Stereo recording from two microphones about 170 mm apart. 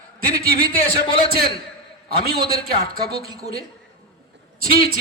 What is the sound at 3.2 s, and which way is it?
Speech, 20° right (ahead or behind).